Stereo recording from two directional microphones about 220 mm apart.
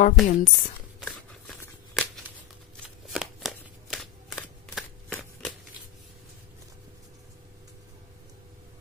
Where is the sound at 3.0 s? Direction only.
Centre (ahead or behind).